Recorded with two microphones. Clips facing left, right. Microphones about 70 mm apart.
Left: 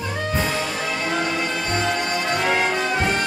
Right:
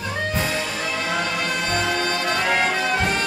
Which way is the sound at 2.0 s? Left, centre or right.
Centre.